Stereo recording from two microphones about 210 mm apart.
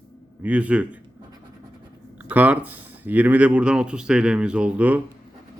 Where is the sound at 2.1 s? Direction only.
5° right (ahead or behind).